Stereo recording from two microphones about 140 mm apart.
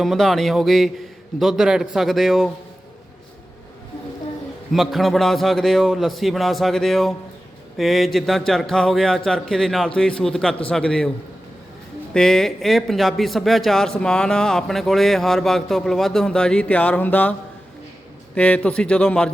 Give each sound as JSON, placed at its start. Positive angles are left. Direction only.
{"t": 0.0, "sound": "speech", "side_deg": 0}
{"t": 4.7, "sound": "a man's voice", "side_deg": 0}
{"t": 12.1, "sound": "speech", "side_deg": 5}
{"t": 18.3, "sound": "a man's voice", "side_deg": 10}